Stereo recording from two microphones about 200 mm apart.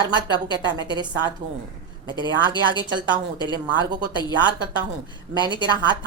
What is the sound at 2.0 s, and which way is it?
Speech, 25° right (ahead or behind).